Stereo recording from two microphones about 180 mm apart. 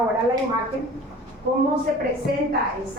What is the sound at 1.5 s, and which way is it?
Speech, 50° right (ahead or behind).